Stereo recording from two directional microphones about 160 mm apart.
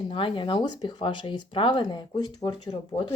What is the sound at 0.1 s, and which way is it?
Speech, 30° left (ahead or behind).